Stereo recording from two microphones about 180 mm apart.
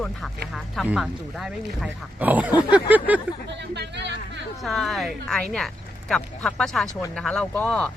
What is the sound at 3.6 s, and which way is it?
Speech, 70° right (ahead or behind).